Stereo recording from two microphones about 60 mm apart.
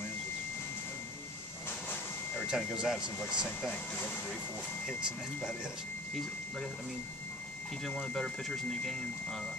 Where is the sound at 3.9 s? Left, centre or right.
Left.